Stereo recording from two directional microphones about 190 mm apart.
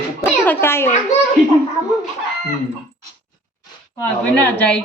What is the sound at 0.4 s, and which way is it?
Speech, 10° left (ahead or behind).